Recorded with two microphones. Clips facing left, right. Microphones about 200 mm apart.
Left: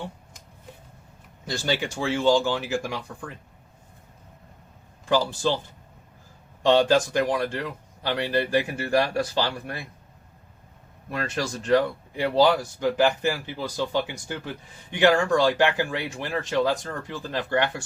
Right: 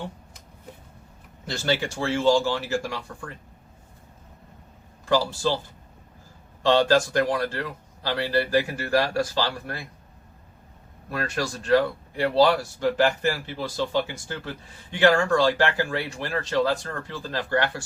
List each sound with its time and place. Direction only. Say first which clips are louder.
1.5 s speech: right 1 dB; 15° left (ahead or behind)
5.0 s speech: even; 20° left (ahead or behind)
6.6 s speech: even; 20° left (ahead or behind)
11.1 s speech: even; 20° left (ahead or behind)